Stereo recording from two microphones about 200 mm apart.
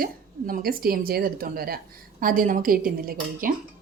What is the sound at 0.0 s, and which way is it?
A woman's voice, 45° right (ahead or behind).